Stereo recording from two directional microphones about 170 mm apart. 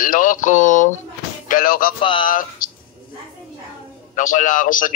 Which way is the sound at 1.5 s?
55° left (ahead or behind).